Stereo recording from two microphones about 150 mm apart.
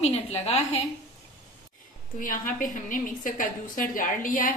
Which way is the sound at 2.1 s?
65° left (ahead or behind).